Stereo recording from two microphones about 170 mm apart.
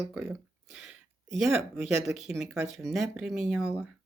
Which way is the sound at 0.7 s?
5° right (ahead or behind).